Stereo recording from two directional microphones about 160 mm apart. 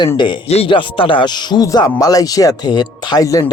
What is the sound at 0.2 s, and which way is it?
Speech, 30° left (ahead or behind).